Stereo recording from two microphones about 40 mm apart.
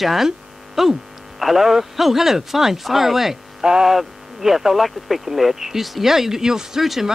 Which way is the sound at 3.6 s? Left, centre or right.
Centre.